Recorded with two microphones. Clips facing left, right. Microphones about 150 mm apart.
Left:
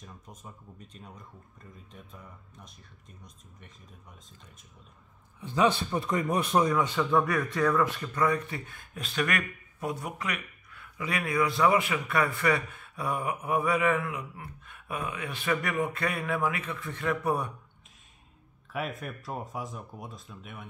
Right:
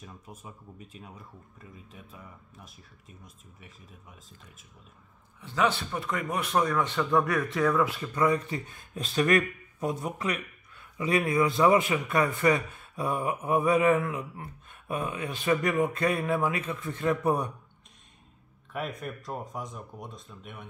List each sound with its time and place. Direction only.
0.0 s speech: 10° right (ahead or behind)
5.4 s speech: 20° left (ahead or behind); by 8.1 s 5° right (ahead or behind)
8.1 s speech: 20° right (ahead or behind)
18.7 s speech: centre (ahead or behind)